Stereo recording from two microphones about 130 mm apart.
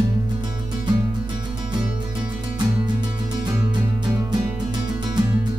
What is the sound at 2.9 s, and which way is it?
Music, 30° right (ahead or behind).